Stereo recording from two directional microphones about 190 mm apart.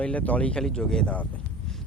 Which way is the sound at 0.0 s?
5° left (ahead or behind).